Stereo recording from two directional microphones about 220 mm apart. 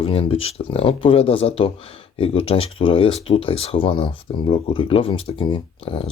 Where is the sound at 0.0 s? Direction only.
25° left (ahead or behind).